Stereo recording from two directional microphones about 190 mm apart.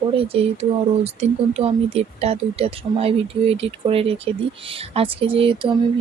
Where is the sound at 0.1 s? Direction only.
30° right (ahead or behind).